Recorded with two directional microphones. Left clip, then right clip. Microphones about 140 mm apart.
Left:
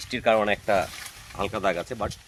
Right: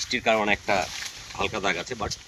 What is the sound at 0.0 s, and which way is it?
Speech, 60° left (ahead or behind).